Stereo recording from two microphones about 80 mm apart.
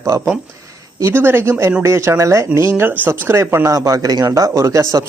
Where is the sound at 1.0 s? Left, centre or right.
Right.